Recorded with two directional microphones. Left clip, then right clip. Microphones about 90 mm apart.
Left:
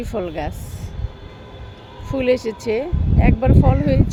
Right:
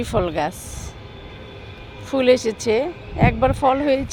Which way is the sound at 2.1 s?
5° right (ahead or behind).